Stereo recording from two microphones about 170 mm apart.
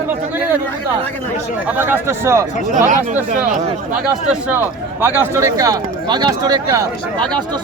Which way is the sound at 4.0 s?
5° right (ahead or behind).